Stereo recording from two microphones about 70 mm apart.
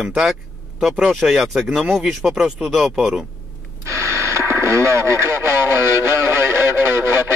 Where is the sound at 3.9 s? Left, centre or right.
Right.